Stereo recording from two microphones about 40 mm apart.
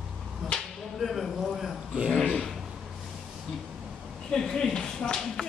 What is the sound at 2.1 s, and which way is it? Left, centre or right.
Speech, left.